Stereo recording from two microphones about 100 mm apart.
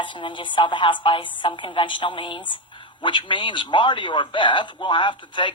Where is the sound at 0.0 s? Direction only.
55° left (ahead or behind).